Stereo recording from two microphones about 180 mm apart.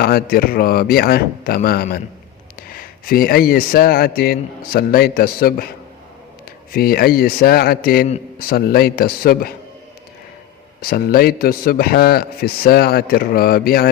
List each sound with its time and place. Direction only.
0.0 s a man's voice: 55° left (ahead or behind)
10.8 s a man's voice: 55° left (ahead or behind)